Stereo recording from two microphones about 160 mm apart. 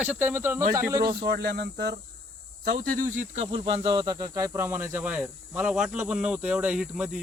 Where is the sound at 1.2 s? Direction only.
85° right.